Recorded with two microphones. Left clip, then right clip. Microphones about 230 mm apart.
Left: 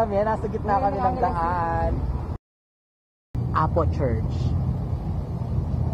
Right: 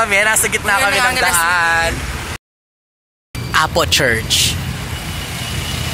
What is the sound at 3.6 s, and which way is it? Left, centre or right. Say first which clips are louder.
Speech: right 10 dB; right.